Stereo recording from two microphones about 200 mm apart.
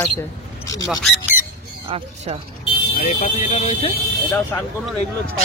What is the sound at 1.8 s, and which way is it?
Speech, 30° right (ahead or behind).